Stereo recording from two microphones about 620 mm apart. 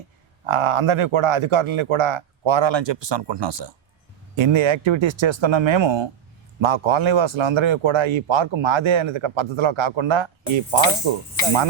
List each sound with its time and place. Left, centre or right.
0.4 s speech: right